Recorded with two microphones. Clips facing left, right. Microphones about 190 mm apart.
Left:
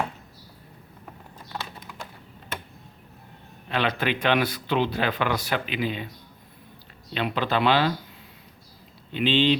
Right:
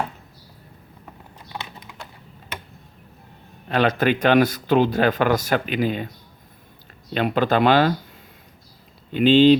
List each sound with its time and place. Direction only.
3.7 s speech: 45° right (ahead or behind)
7.1 s speech: 45° right (ahead or behind)
9.1 s speech: 45° right (ahead or behind)